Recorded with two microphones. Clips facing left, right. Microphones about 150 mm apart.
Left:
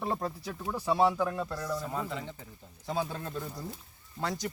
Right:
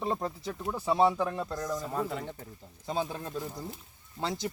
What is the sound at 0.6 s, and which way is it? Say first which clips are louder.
Speech: right 1 dB; centre (ahead or behind).